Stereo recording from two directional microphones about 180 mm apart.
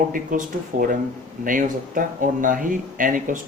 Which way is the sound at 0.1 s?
50° right (ahead or behind).